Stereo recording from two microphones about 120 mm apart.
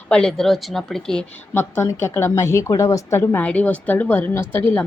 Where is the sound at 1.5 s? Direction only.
20° left (ahead or behind).